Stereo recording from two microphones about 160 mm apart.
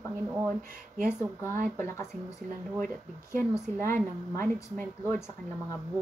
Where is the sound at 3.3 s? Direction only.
15° left (ahead or behind).